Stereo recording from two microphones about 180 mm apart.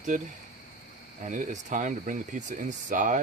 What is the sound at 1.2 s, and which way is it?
Speech, 45° right (ahead or behind).